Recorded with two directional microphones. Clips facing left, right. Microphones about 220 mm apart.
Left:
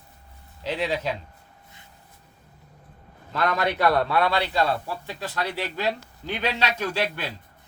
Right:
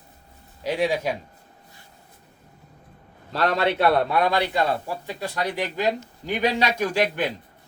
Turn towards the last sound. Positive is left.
turn(degrees=-15)  # may be behind; listen again after turning